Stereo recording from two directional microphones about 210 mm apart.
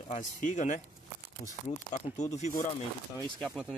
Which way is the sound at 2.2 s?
30° left (ahead or behind).